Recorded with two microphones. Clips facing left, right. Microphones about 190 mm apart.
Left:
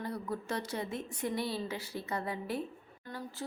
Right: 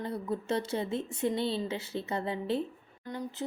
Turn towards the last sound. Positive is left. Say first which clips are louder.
# right 5 dB
turn(degrees=-20)  # may be behind; listen again after turning